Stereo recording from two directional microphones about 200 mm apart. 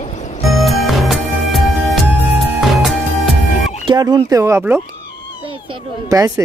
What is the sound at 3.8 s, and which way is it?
Speech, 20° right (ahead or behind).